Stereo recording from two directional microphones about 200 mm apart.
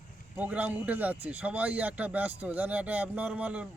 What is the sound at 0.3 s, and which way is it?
A man's voice, 5° right (ahead or behind).